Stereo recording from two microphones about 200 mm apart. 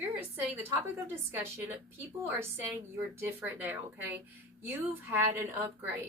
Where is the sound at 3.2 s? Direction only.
10° right (ahead or behind).